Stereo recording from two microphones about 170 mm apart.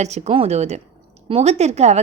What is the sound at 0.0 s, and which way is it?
A woman's voice, 40° right (ahead or behind).